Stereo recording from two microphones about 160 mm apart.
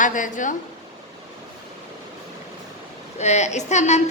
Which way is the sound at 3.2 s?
45° left (ahead or behind).